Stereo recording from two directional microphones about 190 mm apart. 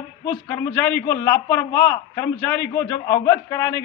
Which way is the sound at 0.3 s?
10° left (ahead or behind).